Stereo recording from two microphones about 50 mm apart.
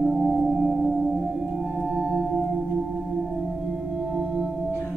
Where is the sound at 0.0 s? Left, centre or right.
Centre.